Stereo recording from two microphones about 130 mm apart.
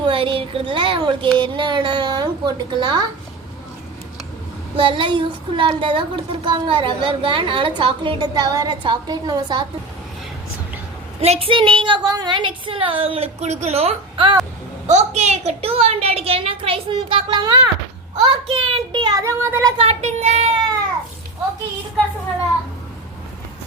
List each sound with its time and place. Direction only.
0.0 s speech: 40° right (ahead or behind)
4.8 s speech: 40° right (ahead or behind)
11.2 s a woman's voice: 50° right (ahead or behind)
14.8 s a woman's voice: 60° right (ahead or behind); by 17.7 s 30° right (ahead or behind)
18.3 s speech: 45° right (ahead or behind); by 19.7 s 25° right (ahead or behind)
19.7 s speech: 50° right (ahead or behind)